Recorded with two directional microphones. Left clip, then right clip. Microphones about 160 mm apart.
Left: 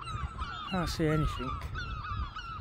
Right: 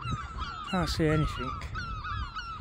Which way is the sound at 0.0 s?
20° right (ahead or behind).